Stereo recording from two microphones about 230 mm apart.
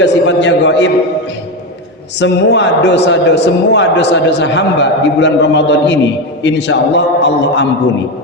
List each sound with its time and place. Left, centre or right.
0.0 s a man's voice: left
2.1 s a man's voice: left